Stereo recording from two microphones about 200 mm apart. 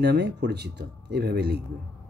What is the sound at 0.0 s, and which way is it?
A man's voice, 55° right (ahead or behind).